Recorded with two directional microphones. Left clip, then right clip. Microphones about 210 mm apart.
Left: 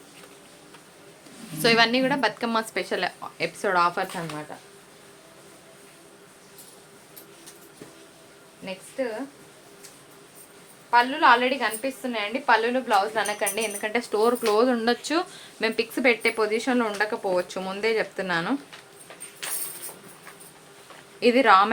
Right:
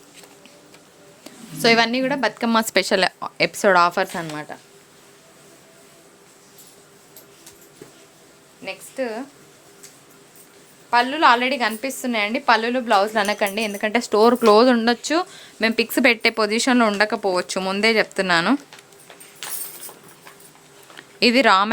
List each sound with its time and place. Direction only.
1.5 s a woman's voice: 30° right (ahead or behind); by 4.5 s 60° right (ahead or behind)
8.6 s a sound: 60° right (ahead or behind)
10.9 s a woman's voice: 60° right (ahead or behind)
14.8 s speech: 35° right (ahead or behind)
21.2 s a woman's voice: 55° right (ahead or behind)